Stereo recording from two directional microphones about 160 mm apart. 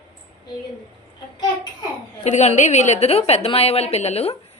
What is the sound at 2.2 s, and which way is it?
A woman's voice, 45° left (ahead or behind).